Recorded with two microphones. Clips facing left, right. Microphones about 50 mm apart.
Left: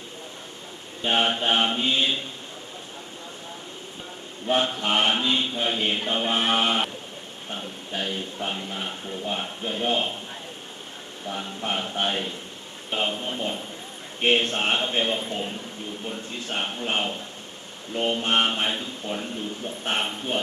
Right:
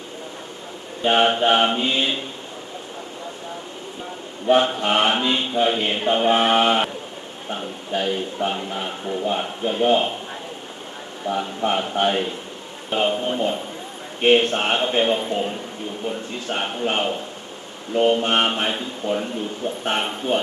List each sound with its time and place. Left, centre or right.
1.0 s mantra: right
4.4 s mantra: right
8.0 s a man's voice: right
9.7 s mantra: right
11.3 s mantra: right